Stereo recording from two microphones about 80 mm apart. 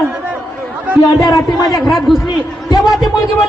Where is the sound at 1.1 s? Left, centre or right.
Left.